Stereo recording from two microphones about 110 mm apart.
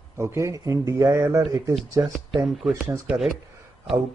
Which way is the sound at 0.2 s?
25° right (ahead or behind).